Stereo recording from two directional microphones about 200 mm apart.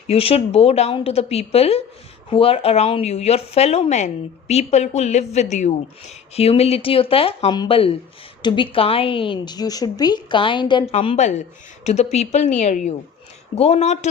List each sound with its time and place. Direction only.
0.1 s a woman's voice: 30° left (ahead or behind)